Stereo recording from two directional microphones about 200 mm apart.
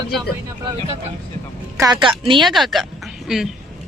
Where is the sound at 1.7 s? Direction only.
20° right (ahead or behind).